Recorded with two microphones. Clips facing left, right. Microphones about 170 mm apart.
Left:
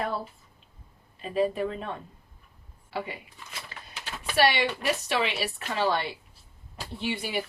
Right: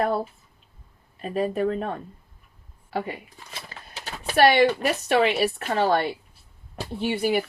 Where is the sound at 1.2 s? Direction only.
45° right (ahead or behind).